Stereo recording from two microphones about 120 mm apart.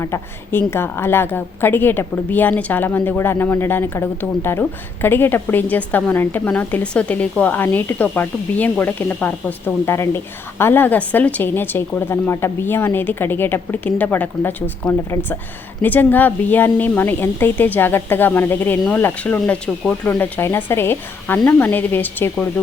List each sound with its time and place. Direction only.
0.0 s a woman's voice: 25° left (ahead or behind)